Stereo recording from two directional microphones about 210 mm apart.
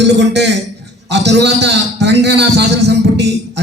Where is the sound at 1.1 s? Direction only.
55° right (ahead or behind).